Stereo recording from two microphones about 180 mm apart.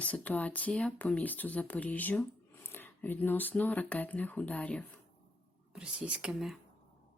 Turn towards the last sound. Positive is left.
turn(degrees=-5)  # may be behind; listen again after turning